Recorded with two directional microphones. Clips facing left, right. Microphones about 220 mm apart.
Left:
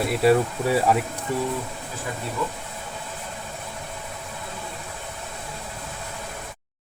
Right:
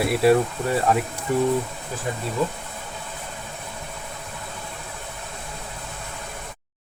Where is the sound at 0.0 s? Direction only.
5° right (ahead or behind).